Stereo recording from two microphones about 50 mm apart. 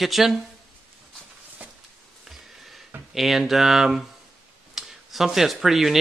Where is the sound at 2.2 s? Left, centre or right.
Centre.